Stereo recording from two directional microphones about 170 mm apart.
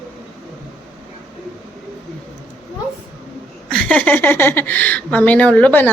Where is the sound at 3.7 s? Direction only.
5° left (ahead or behind).